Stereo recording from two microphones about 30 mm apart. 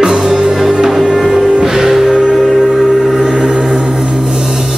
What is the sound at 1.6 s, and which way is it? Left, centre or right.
Music, centre.